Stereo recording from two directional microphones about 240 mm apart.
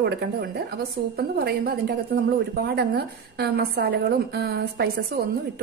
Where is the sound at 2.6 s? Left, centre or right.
Right.